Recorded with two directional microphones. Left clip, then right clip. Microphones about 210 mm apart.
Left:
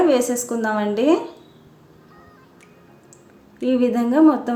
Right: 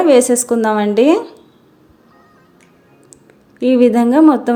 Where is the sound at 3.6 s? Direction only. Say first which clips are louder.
Right 8 dB; 40° right (ahead or behind).